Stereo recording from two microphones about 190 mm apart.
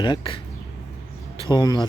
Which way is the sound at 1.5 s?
20° left (ahead or behind).